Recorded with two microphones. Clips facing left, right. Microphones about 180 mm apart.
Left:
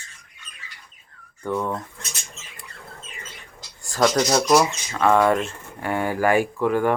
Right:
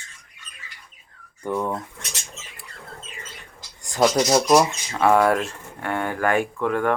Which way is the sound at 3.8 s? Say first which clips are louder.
Right 1 dB; 15° right (ahead or behind).